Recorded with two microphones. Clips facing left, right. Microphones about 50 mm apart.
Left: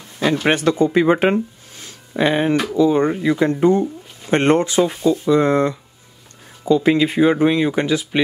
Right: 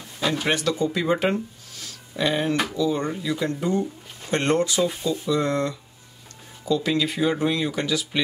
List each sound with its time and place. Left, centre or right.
0.5 s speech: left